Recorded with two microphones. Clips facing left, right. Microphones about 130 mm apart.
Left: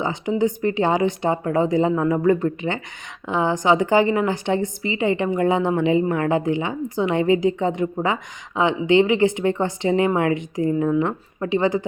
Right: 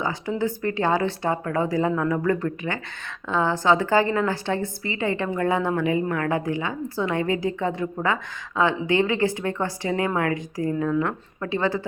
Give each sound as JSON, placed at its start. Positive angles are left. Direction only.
{"t": 0.0, "sound": "a woman's voice", "side_deg": 20}